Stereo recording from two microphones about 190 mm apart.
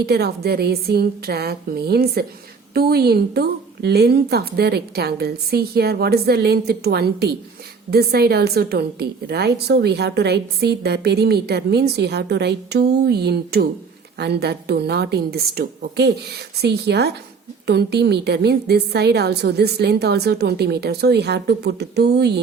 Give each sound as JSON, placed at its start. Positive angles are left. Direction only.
{"t": 0.0, "sound": "a woman's voice", "side_deg": -60}